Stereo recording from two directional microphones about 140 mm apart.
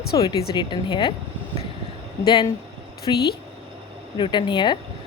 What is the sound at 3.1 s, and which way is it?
Speech, 30° left (ahead or behind).